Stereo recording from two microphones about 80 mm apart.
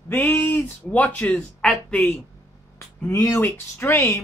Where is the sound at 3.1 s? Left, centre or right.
Left.